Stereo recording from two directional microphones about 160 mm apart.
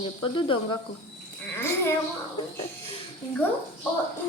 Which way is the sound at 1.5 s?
15° left (ahead or behind).